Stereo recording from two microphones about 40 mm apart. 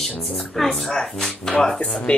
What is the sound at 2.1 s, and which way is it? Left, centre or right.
Speech, left.